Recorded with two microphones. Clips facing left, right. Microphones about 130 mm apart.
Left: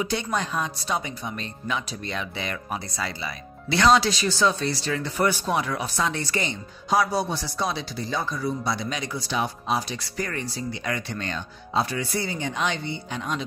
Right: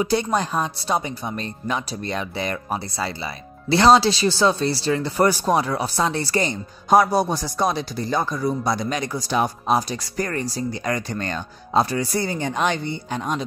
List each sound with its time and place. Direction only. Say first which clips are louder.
0.0 s speech: right 6 dB; 35° right (ahead or behind)